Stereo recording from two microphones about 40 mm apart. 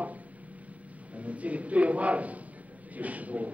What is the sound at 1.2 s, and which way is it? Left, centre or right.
Speech, right.